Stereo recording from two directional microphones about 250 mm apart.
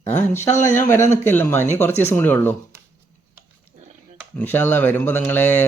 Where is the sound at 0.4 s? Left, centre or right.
Centre.